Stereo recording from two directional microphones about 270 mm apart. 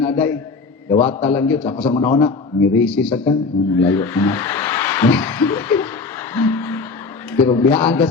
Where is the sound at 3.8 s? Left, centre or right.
Centre.